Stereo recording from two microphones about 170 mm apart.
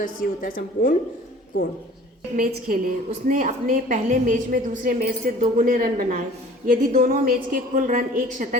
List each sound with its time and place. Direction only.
0.0 s a woman's voice: 55° left (ahead or behind)
2.3 s a woman's voice: 55° right (ahead or behind)